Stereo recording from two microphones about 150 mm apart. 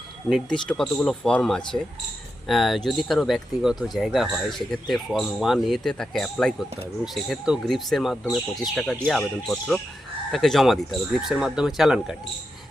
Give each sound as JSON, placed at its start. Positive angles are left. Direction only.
{"t": 0.3, "sound": "speech", "side_deg": 0}